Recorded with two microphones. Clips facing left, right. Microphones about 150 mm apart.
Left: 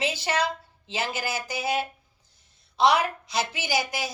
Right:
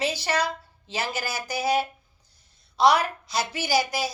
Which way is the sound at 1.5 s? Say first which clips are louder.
Right 5 dB; 35° right (ahead or behind).